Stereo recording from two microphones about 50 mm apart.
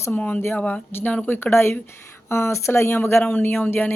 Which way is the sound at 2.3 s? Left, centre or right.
Left.